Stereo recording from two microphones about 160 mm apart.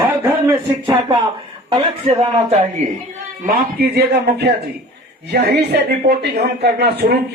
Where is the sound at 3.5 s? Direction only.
85° right.